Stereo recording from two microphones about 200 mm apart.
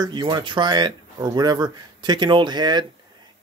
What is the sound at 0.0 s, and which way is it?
Speech, 20° right (ahead or behind).